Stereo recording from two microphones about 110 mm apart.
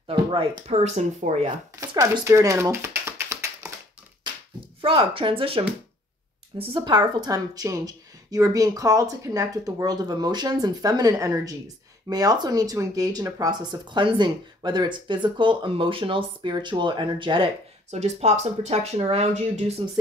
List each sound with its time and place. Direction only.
0.0 s speech: 50° right (ahead or behind)
0.7 s speech: 90° right
2.2 s a sound: 25° right (ahead or behind)
4.8 s speech: 50° right (ahead or behind)
6.6 s a woman's voice: 45° right (ahead or behind)
17.9 s speech: 90° right; by 19.6 s 70° right (ahead or behind)
19.8 s speech: 50° right (ahead or behind)